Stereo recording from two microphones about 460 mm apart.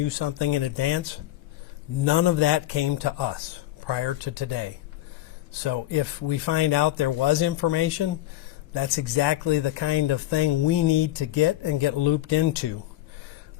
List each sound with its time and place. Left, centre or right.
0.2 s speech: left
2.0 s speech: left
5.6 s speech: left